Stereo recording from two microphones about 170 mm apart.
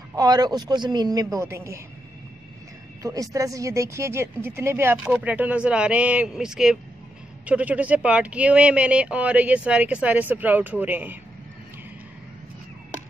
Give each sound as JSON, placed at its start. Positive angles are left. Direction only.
{"t": 0.1, "sound": "speech", "side_deg": -20}
{"t": 3.0, "sound": "speech", "side_deg": -20}